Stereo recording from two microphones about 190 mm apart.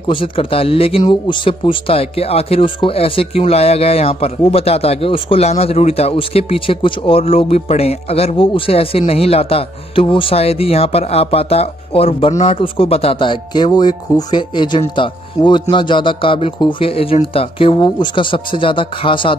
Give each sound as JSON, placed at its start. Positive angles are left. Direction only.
{"t": 0.1, "sound": "speech", "side_deg": 30}